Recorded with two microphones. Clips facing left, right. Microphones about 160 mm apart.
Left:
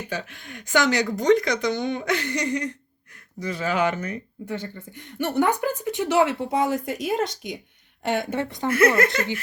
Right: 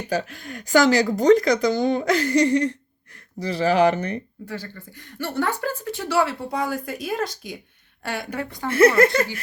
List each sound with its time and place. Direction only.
0.1 s speech: 40° right (ahead or behind)
4.4 s a woman's voice: 25° left (ahead or behind)
9.1 s speech: 40° right (ahead or behind)